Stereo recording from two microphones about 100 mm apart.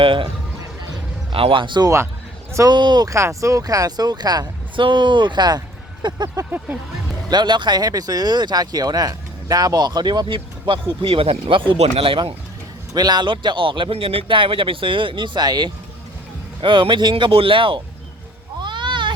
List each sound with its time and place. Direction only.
0.0 s speech: 60° right (ahead or behind)
1.3 s speech: 60° right (ahead or behind)
3.1 s speech: 30° right (ahead or behind)
6.2 s speech: 20° right (ahead or behind)
7.3 s speech: 45° right (ahead or behind)
12.9 s speech: 45° right (ahead or behind)
16.6 s speech: 55° right (ahead or behind)
18.6 s a sound: 50° right (ahead or behind)